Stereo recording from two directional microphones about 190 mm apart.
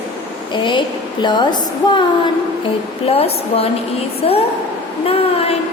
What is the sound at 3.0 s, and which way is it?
A woman's voice, 30° left (ahead or behind).